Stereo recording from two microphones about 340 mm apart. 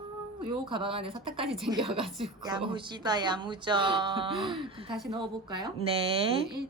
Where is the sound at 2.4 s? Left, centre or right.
Centre.